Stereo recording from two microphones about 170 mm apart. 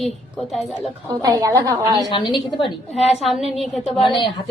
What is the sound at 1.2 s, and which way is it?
Speech, 20° right (ahead or behind).